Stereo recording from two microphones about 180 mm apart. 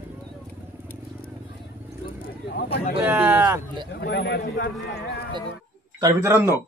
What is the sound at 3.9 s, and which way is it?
Speech, 70° left (ahead or behind).